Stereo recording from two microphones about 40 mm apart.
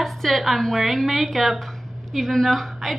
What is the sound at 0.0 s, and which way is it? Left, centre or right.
A woman's voice, centre.